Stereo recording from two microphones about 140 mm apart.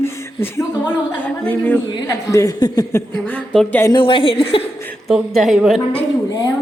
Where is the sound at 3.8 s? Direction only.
35° left (ahead or behind).